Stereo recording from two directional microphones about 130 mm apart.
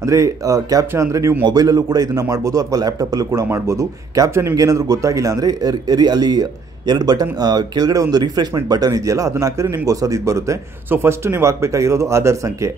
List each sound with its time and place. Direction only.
0.0 s a man's voice: 25° right (ahead or behind)